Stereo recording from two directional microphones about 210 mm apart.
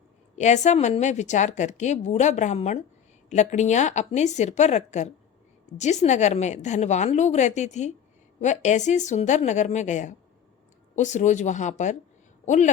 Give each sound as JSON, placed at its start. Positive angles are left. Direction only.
{"t": 0.3, "sound": "a woman's voice", "side_deg": 35}